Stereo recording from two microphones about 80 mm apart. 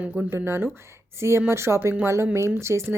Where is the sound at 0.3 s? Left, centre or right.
Right.